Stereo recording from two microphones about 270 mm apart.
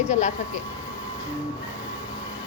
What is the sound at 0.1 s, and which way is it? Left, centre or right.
Speech, left.